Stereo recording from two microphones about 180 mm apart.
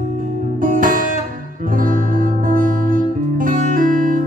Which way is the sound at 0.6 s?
50° right (ahead or behind).